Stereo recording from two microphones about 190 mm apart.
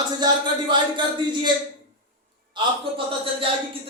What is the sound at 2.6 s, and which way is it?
Speech, 25° right (ahead or behind).